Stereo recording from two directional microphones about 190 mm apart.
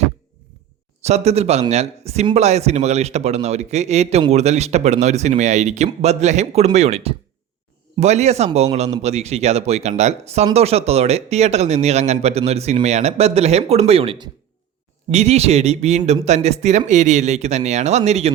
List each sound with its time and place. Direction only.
1.0 s speech: 35° right (ahead or behind)